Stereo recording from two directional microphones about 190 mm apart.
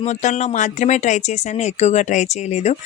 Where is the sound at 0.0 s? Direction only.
40° left (ahead or behind).